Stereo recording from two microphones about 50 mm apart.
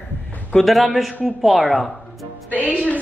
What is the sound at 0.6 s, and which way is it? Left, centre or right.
A woman's voice, centre.